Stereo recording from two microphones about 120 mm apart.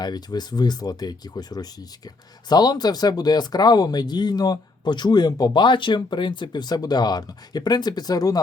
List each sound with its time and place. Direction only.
0.0 s speech: 35° left (ahead or behind)